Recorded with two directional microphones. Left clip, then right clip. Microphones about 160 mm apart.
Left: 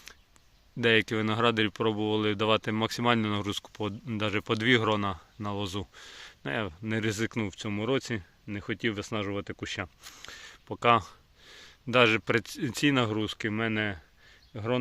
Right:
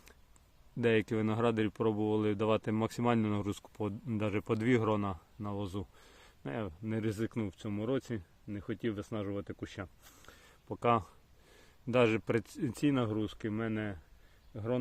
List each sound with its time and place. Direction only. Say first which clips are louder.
0.8 s speech: left 6 dB; 5° right (ahead or behind)
5.1 s speech: left 6 dB; 10° left (ahead or behind)
10.7 s speech: left 7 dB; 5° left (ahead or behind)
12.7 s speech: left 7 dB; 15° left (ahead or behind)